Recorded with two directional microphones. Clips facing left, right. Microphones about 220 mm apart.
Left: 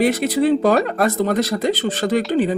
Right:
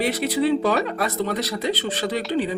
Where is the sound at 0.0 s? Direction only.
45° left (ahead or behind).